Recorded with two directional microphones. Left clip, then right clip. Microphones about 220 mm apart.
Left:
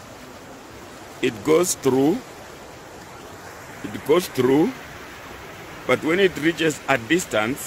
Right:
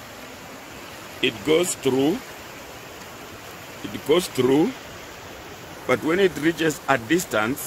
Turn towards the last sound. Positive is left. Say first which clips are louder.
# left 1 dB
turn(degrees=0)  # may be behind; listen again after turning